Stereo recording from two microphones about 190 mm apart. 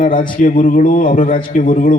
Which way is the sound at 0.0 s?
45° left (ahead or behind).